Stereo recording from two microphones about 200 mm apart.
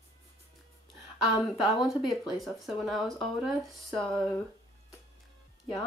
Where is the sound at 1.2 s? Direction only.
Centre (ahead or behind).